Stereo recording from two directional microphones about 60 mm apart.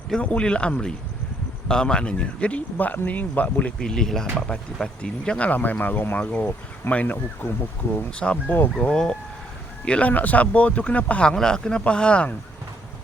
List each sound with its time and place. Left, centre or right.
0.2 s speech: centre
3.8 s speech: centre
5.5 s speech: left
8.2 s speech: left
8.9 s speech: centre
9.8 s speech: left
11.3 s speech: centre